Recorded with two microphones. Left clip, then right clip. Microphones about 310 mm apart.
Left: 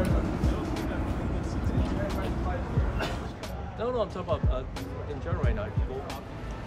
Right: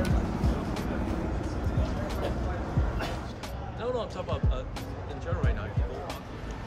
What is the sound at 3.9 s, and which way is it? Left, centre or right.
Music, left.